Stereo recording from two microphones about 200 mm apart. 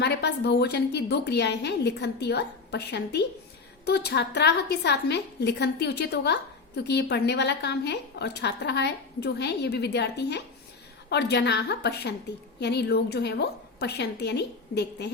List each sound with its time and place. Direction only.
0.0 s a woman's voice: 55° left (ahead or behind)